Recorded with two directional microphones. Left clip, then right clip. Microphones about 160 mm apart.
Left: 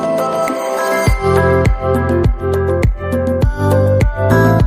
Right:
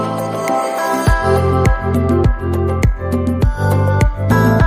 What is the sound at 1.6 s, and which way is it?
Music, centre (ahead or behind).